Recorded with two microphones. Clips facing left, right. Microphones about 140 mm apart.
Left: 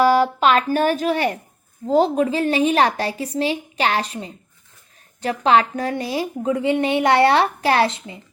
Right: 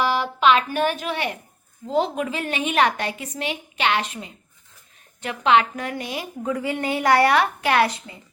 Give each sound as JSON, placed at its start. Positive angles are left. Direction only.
{"t": 0.0, "sound": "a woman's voice", "side_deg": 40}